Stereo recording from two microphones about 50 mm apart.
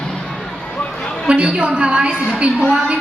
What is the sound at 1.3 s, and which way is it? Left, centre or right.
Speech, right.